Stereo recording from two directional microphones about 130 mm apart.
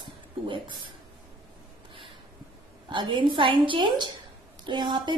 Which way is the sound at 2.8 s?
40° right (ahead or behind).